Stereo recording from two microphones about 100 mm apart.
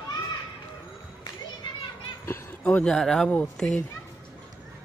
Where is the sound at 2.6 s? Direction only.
10° left (ahead or behind).